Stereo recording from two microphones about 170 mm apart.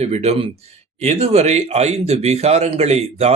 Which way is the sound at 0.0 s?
40° right (ahead or behind).